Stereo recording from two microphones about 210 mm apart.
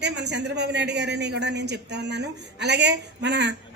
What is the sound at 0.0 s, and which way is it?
A man's voice, 55° right (ahead or behind).